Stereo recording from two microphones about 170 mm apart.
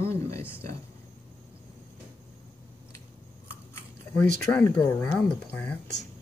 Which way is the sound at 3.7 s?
10° left (ahead or behind).